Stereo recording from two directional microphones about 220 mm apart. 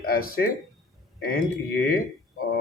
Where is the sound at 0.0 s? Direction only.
40° left (ahead or behind).